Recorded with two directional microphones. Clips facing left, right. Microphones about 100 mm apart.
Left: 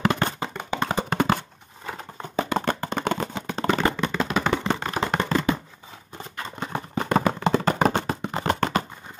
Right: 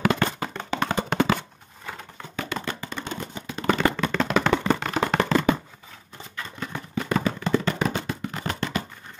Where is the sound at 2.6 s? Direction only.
55° left (ahead or behind); by 3.4 s 80° left.